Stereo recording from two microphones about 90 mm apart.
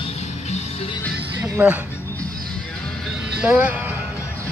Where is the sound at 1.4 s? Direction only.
20° right (ahead or behind).